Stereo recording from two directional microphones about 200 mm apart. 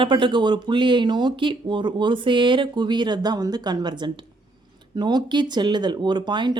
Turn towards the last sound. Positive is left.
turn(degrees=-20)  # may be behind; listen again after turning